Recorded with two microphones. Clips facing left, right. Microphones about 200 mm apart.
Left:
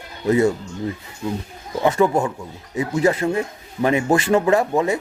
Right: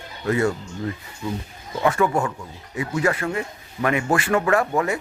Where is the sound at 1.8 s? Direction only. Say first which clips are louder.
Left 3 dB; 20° left (ahead or behind).